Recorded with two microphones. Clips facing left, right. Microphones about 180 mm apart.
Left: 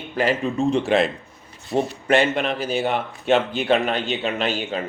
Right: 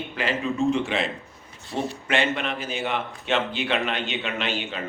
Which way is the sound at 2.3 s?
40° left (ahead or behind).